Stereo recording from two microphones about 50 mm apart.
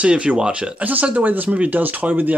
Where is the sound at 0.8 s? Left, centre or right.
Right.